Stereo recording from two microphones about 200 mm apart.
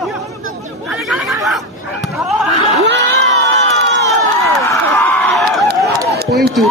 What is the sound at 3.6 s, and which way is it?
Crowd, 65° right (ahead or behind).